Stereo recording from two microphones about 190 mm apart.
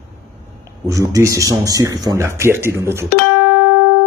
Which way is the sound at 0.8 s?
15° right (ahead or behind).